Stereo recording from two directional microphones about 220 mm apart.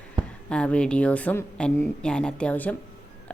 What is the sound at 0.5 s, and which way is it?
A woman's voice, 5° left (ahead or behind).